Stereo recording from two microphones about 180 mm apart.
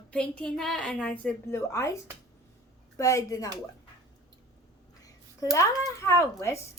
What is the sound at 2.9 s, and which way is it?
Speech, 20° left (ahead or behind).